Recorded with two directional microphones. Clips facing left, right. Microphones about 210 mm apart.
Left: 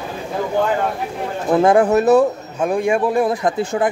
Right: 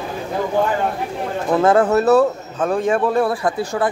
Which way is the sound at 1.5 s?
15° left (ahead or behind).